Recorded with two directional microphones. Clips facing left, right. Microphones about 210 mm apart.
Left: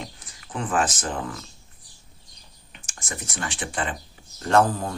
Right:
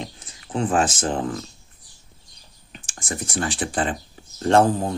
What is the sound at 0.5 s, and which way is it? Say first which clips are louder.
Speech: right 4 dB; 30° right (ahead or behind).